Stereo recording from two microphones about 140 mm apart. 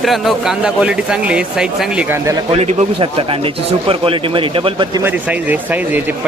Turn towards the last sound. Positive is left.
turn(degrees=-15)  # may be behind; listen again after turning